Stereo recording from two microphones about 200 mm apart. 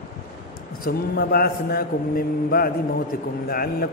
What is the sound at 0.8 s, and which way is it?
A man's voice, 50° left (ahead or behind).